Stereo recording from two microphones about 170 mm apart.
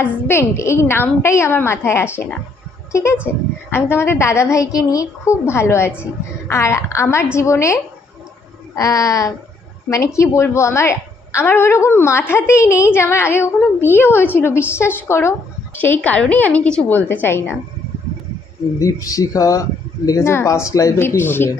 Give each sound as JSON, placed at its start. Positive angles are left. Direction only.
{"t": 0.0, "sound": "a woman's voice", "side_deg": 15}
{"t": 18.8, "sound": "a woman's voice", "side_deg": 20}